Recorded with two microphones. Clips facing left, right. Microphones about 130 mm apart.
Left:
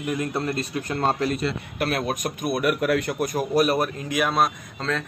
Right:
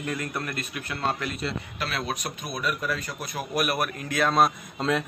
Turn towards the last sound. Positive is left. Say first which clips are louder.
# right 2 dB
turn(degrees=-15)  # may be behind; listen again after turning